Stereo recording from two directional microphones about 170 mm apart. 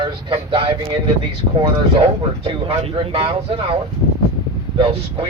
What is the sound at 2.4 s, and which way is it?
Speech, 35° right (ahead or behind).